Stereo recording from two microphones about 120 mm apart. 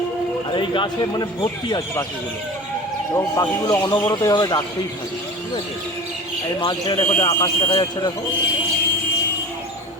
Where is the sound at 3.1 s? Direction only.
30° left (ahead or behind).